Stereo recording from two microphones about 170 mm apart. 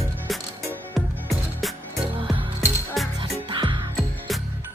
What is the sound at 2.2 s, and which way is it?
Music, 30° right (ahead or behind).